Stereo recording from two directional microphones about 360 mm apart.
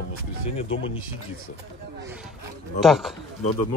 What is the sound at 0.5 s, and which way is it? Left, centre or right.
Speech, centre.